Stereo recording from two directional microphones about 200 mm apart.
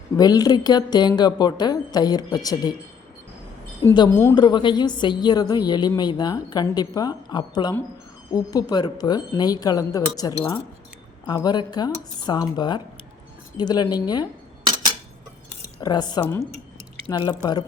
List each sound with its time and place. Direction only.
0.2 s speech: 20° left (ahead or behind)
3.8 s speech: 15° left (ahead or behind)
15.8 s speech: 20° left (ahead or behind)